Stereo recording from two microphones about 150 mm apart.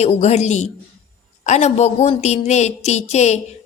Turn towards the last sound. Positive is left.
turn(degrees=50)  # may be behind; listen again after turning